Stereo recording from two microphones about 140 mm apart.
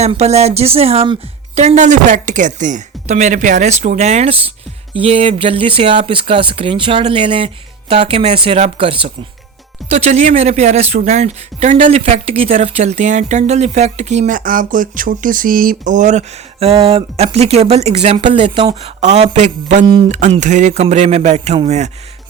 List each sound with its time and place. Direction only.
0.0 s speech: 50° right (ahead or behind)
1.5 s speech: 55° right (ahead or behind); by 9.0 s 40° right (ahead or behind)
9.9 s speech: 55° right (ahead or behind)
20.1 s speech: 60° right (ahead or behind)